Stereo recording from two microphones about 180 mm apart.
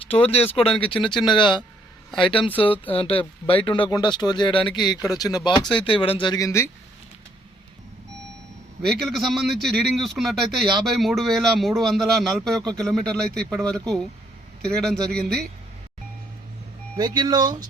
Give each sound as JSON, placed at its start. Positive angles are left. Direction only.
{"t": 0.1, "sound": "speech", "side_deg": 35}
{"t": 8.9, "sound": "speech", "side_deg": 0}
{"t": 17.0, "sound": "speech", "side_deg": -20}